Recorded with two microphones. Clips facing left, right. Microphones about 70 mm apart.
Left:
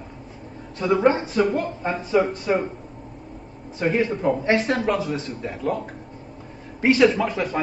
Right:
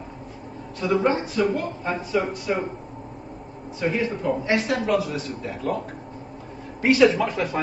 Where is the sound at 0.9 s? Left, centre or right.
Left.